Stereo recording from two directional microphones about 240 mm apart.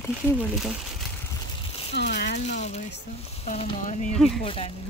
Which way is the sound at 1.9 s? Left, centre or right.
Left.